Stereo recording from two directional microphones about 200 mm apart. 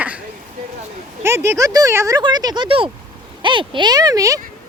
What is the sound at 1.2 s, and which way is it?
Speech, 10° right (ahead or behind).